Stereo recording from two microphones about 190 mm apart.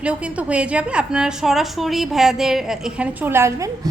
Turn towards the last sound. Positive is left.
turn(degrees=-15)  # may be behind; listen again after turning